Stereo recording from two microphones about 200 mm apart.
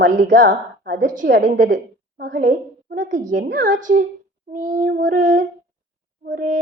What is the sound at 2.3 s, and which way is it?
Speech, 40° right (ahead or behind).